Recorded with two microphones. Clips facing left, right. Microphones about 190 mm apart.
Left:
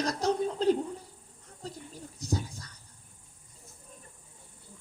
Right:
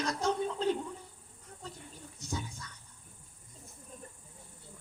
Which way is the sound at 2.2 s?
35° left (ahead or behind).